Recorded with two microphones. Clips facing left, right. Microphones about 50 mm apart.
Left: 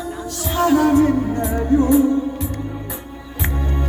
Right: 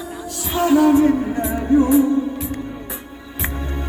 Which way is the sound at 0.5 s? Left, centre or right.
Centre.